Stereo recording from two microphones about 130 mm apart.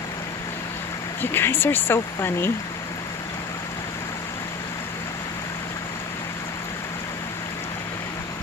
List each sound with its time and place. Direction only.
1.2 s speech: 15° left (ahead or behind)